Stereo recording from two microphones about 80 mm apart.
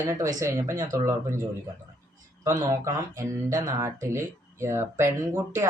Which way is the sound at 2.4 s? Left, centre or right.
Right.